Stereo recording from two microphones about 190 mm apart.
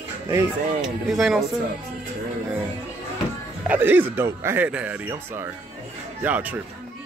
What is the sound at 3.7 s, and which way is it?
Speech, 10° right (ahead or behind).